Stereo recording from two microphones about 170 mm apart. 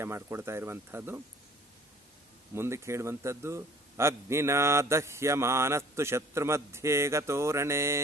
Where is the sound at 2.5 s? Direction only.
15° right (ahead or behind).